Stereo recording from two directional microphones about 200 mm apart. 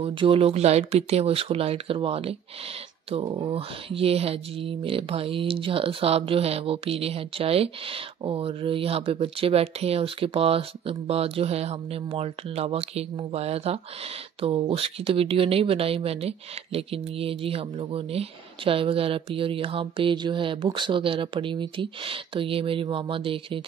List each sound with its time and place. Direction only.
0.0 s speech: 25° right (ahead or behind)